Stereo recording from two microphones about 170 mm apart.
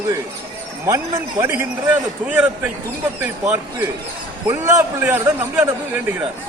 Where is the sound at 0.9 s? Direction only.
15° right (ahead or behind).